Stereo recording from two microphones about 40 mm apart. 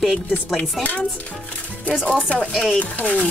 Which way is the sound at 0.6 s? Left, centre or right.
Left.